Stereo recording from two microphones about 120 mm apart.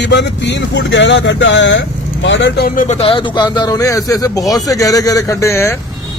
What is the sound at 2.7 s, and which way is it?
Speech, 70° left (ahead or behind).